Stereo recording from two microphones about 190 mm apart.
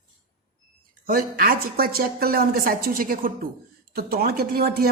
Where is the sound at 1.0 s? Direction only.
50° right (ahead or behind).